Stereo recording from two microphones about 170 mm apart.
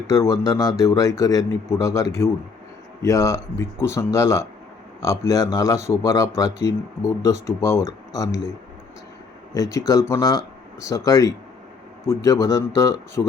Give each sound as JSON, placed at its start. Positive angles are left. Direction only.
{"t": 0.1, "sound": "a man's voice", "side_deg": 15}
{"t": 9.6, "sound": "a man's voice", "side_deg": 20}